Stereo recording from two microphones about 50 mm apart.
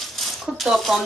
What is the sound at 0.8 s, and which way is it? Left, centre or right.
Speech, centre.